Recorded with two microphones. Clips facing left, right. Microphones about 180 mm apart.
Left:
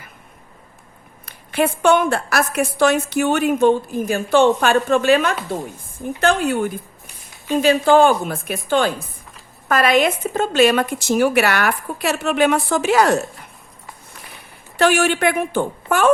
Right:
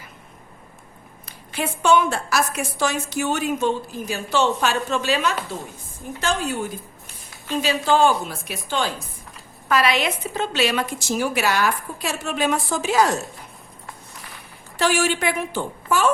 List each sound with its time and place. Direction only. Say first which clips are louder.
1.2 s a woman's voice: left 8 dB; 60° left (ahead or behind)
14.8 s a woman's voice: left 5 dB; 60° left (ahead or behind)